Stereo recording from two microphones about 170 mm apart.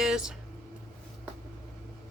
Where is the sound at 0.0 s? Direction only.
5° right (ahead or behind).